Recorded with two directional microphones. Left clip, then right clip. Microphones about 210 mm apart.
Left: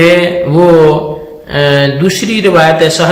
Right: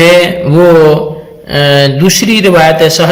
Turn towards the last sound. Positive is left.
turn(degrees=-45)  # may be behind; listen again after turning